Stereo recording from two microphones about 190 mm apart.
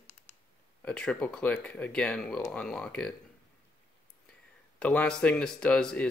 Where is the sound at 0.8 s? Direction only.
5° left (ahead or behind).